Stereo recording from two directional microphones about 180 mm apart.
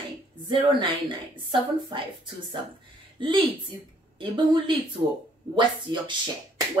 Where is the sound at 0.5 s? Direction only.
30° right (ahead or behind).